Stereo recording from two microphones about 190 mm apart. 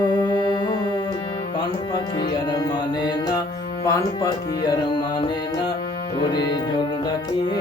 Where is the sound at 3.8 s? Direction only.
15° left (ahead or behind).